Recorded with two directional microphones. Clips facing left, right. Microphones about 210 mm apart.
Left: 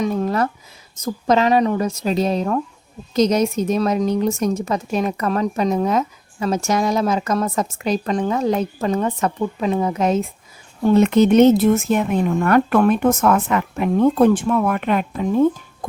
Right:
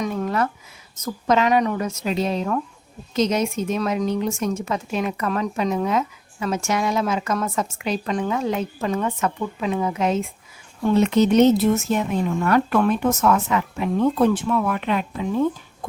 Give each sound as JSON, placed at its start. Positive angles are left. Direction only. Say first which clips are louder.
{"t": 0.0, "sound": "a sound", "louder": "left 3 dB", "side_deg": 35}
{"t": 1.0, "sound": "a woman's voice", "louder": "left 3 dB", "side_deg": 35}
{"t": 10.9, "sound": "speech", "louder": "left 3 dB", "side_deg": 55}